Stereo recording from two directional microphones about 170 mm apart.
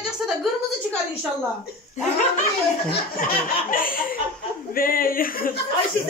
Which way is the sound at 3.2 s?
55° left (ahead or behind).